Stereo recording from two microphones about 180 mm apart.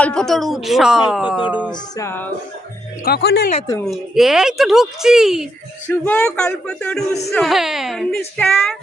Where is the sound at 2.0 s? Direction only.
10° left (ahead or behind).